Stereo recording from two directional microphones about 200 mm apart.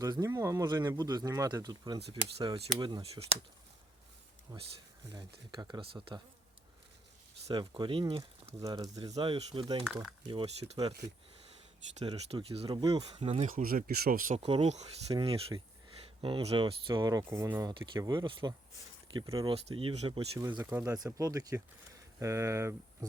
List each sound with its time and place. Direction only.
0.0 s speech: 15° right (ahead or behind)
4.5 s speech: 15° right (ahead or behind)
7.4 s speech: 25° right (ahead or behind)
9.8 s speech: centre (ahead or behind)
10.2 s speech: 30° right (ahead or behind)
12.0 s speech: 30° right (ahead or behind)
14.3 s speech: 30° right (ahead or behind); by 23.0 s 15° right (ahead or behind)